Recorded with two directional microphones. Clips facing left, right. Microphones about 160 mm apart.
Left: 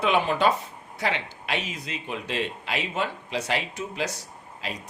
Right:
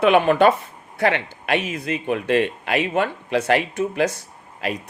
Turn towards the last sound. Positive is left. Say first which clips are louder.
# right 8 dB
turn(degrees=-60)  # may be behind; listen again after turning